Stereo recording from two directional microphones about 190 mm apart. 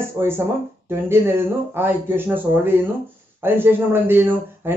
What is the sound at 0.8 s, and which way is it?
Speech, 10° right (ahead or behind).